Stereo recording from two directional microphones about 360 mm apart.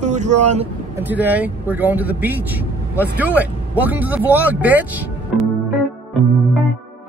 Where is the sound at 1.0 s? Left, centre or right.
Centre.